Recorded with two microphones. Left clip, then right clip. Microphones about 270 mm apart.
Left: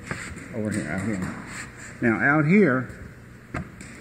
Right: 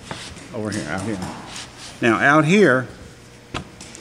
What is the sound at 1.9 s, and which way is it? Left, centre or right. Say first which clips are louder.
Speech: right 6 dB; right.